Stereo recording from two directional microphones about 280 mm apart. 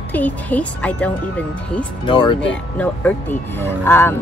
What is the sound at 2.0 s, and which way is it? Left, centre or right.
Speech, centre.